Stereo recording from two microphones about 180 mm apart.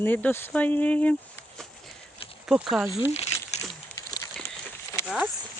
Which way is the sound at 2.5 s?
5° right (ahead or behind).